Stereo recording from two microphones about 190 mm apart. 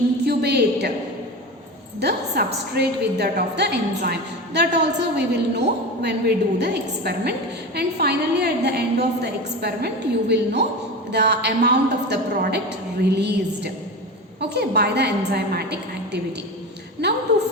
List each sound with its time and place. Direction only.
0.3 s a woman's voice: 60° right (ahead or behind)
2.0 s a woman's voice: 60° right (ahead or behind)